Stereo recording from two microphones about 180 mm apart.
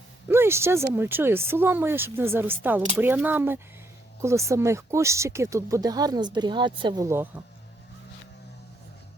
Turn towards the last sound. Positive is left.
turn(degrees=-15)  # may be behind; listen again after turning